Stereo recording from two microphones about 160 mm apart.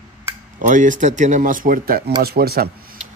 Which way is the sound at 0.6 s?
55° right (ahead or behind).